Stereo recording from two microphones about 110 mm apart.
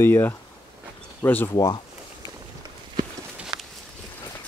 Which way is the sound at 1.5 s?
40° left (ahead or behind).